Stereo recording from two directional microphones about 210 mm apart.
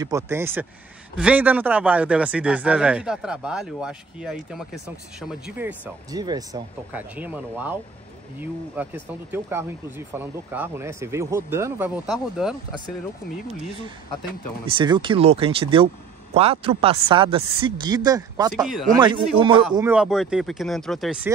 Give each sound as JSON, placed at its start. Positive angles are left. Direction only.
{"t": 0.0, "sound": "speech", "side_deg": -15}
{"t": 6.1, "sound": "speech", "side_deg": -20}
{"t": 6.9, "sound": "speech", "side_deg": -10}
{"t": 9.3, "sound": "speech", "side_deg": -10}
{"t": 14.7, "sound": "speech", "side_deg": -25}
{"t": 19.8, "sound": "speech", "side_deg": -5}